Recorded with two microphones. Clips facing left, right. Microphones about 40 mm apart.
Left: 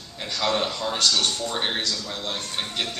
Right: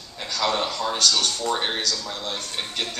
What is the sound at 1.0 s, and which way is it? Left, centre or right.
Speech, left.